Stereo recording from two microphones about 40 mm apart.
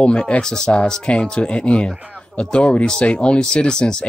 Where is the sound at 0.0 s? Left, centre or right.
Left.